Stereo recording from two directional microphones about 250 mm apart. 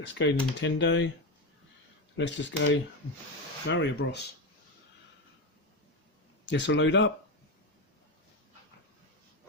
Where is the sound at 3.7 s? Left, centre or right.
Left.